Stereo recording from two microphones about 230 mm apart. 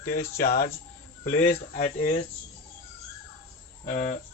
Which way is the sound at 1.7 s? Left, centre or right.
Left.